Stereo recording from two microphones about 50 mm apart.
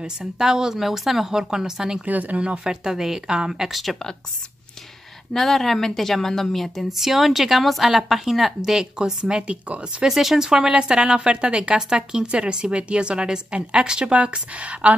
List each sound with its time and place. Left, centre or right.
0.0 s a woman's voice: centre
2.0 s speech: right
2.6 s a woman's voice: centre
5.3 s a woman's voice: centre; by 10.0 s right
10.0 s a woman's voice: centre; by 15.0 s right